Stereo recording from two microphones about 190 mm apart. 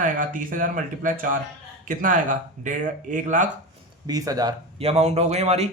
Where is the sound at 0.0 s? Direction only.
45° right (ahead or behind).